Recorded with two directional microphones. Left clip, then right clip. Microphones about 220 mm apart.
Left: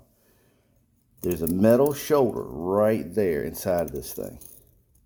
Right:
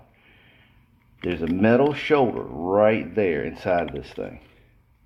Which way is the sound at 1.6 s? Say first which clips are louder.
Even; 60° left (ahead or behind).